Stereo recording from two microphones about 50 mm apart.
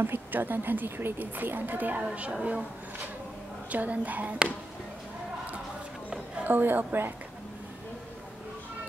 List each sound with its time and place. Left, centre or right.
0.0 s speech: right
1.2 s a woman's voice: right
6.4 s a woman's voice: right